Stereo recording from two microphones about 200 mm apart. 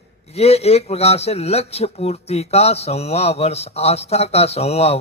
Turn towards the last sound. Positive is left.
turn(degrees=30)  # may be behind; listen again after turning